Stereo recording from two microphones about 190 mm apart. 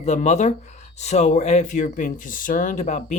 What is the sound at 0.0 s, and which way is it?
Speech, 35° left (ahead or behind).